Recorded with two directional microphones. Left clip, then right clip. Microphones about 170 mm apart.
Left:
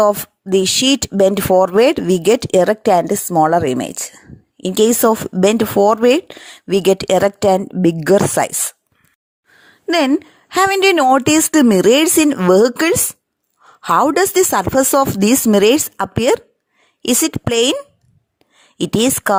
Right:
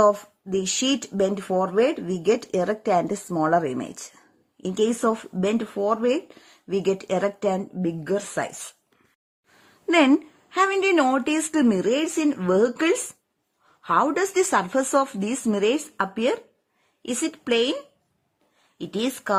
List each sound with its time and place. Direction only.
0.0 s speech: 50° left (ahead or behind)
10.2 s speech: 45° left (ahead or behind)
18.8 s speech: 50° left (ahead or behind)